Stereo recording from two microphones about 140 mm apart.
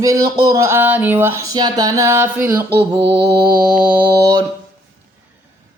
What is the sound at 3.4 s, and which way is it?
Mantra, 90° right.